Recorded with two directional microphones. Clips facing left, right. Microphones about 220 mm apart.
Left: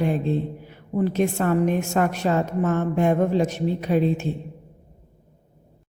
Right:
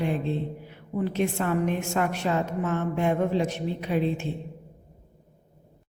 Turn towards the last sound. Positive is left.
turn(degrees=40)  # may be behind; listen again after turning